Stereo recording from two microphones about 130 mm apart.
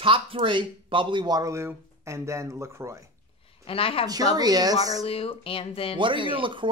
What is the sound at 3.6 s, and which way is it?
Speech, 45° left (ahead or behind).